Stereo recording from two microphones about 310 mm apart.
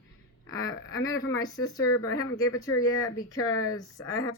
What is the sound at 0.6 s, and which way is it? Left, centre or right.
Speech, left.